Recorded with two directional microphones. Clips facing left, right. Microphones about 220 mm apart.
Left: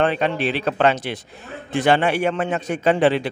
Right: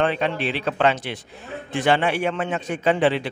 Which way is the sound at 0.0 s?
45° left (ahead or behind).